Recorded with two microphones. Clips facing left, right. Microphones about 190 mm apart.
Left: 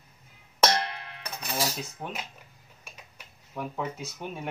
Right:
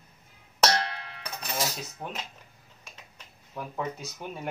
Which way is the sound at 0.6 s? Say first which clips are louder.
Even; 10° left (ahead or behind).